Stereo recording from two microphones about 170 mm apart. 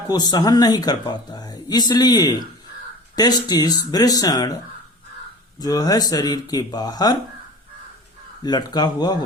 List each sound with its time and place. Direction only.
0.1 s speech: 25° left (ahead or behind)
5.5 s speech: 20° left (ahead or behind)
8.4 s speech: 25° left (ahead or behind)